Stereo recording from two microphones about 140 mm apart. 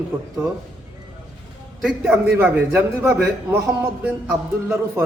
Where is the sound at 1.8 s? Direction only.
5° right (ahead or behind).